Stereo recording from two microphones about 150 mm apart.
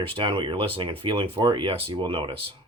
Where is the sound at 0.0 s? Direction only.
35° right (ahead or behind).